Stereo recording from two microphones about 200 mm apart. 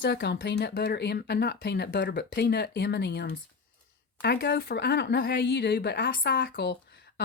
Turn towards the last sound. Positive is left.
turn(degrees=50)  # may be behind; listen again after turning